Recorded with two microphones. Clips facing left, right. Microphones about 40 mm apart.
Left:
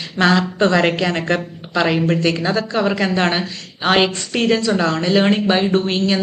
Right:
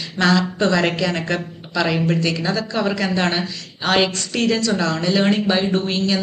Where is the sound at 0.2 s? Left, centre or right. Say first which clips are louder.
Left 2 dB; centre.